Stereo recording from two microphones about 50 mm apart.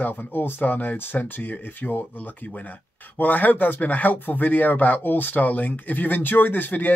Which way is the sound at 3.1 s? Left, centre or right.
Left.